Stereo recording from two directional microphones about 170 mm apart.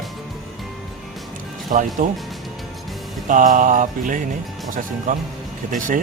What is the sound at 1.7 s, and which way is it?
Music, 50° right (ahead or behind).